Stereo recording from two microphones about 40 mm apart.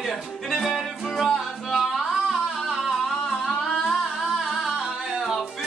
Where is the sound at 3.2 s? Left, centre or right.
Centre.